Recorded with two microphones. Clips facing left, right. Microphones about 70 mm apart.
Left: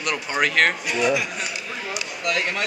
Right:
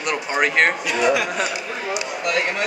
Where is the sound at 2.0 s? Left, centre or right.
Right.